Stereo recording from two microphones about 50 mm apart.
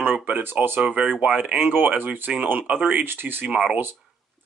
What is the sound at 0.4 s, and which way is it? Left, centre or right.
Speech, right.